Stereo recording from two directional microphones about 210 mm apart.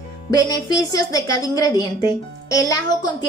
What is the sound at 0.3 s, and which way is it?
A woman's voice, 15° left (ahead or behind).